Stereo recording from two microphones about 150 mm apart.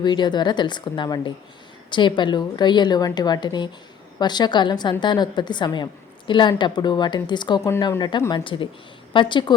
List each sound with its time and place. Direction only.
0.0 s a woman's voice: 30° left (ahead or behind)